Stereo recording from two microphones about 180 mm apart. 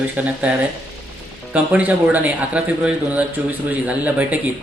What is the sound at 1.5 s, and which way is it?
Speech, 10° right (ahead or behind).